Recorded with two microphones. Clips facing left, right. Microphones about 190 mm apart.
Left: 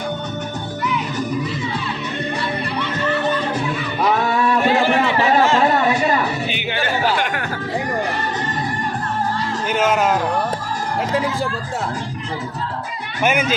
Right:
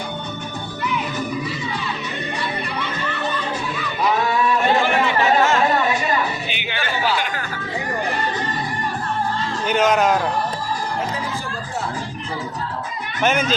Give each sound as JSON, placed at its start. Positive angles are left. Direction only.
{"t": 4.8, "sound": "chatter", "side_deg": 30}
{"t": 6.5, "sound": "music", "side_deg": 45}
{"t": 9.6, "sound": "a man's voice", "side_deg": 5}
{"t": 13.2, "sound": "speech", "side_deg": 10}